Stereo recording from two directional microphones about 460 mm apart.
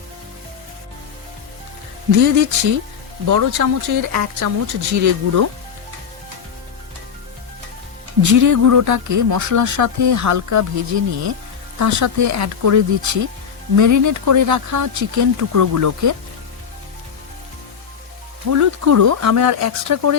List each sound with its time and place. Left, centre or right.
2.1 s speech: right
8.2 s speech: right
18.5 s speech: right